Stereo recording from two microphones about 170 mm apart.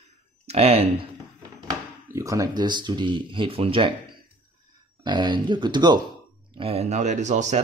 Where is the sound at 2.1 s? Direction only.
20° right (ahead or behind).